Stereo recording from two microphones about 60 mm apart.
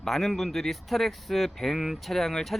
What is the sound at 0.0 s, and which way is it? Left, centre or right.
Speech, centre.